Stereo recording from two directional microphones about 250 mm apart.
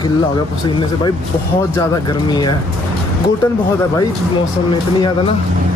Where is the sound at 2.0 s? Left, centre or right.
Centre.